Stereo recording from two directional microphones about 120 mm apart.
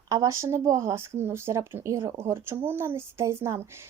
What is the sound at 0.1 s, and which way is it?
Speech, 25° right (ahead or behind).